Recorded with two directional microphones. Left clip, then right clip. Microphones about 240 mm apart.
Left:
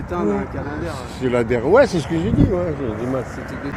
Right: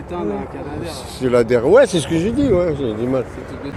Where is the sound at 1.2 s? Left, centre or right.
Right.